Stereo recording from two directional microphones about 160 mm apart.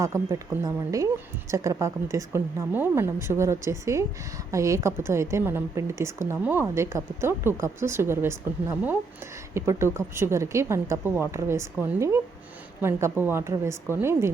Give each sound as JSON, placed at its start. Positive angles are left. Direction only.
{"t": 0.0, "sound": "a woman's voice", "side_deg": -20}